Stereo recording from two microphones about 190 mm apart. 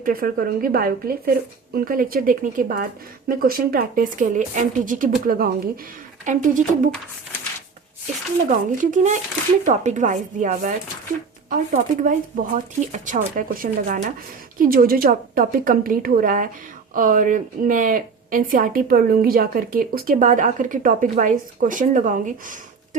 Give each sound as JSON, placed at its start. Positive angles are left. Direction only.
{"t": 0.0, "sound": "a woman's voice", "side_deg": -50}
{"t": 8.4, "sound": "a woman's voice", "side_deg": -40}